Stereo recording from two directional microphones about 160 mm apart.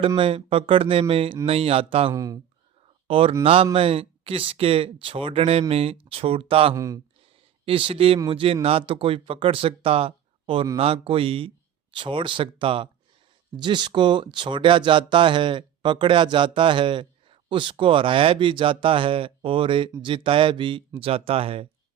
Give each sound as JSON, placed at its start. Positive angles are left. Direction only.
{"t": 0.2, "sound": "speech", "side_deg": -35}
{"t": 2.1, "sound": "speech", "side_deg": -20}
{"t": 3.1, "sound": "speech", "side_deg": -35}
{"t": 6.7, "sound": "speech", "side_deg": -20}
{"t": 7.6, "sound": "speech", "side_deg": -35}